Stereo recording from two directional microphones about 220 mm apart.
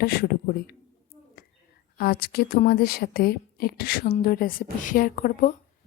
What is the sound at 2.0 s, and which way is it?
A woman's voice, 45° left (ahead or behind).